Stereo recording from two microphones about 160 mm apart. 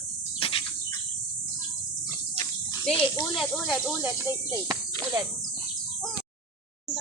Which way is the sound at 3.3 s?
Centre (ahead or behind).